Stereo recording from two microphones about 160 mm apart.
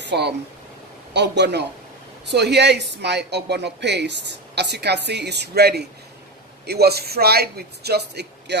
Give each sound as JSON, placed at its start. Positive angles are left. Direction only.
{"t": 0.0, "sound": "a woman's voice", "side_deg": -90}